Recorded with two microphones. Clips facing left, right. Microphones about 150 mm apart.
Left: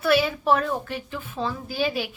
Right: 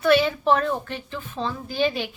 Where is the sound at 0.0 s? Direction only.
5° left (ahead or behind).